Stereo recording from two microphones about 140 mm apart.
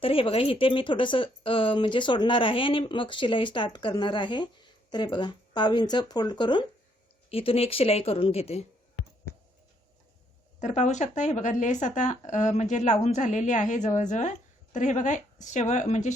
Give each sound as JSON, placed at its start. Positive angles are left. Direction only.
{"t": 0.0, "sound": "a woman's voice", "side_deg": 40}
{"t": 10.6, "sound": "a woman's voice", "side_deg": 55}